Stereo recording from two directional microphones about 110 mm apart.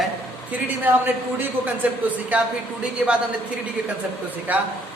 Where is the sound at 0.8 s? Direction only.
15° right (ahead or behind).